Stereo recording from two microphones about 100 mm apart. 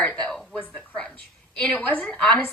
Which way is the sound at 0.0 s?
10° left (ahead or behind).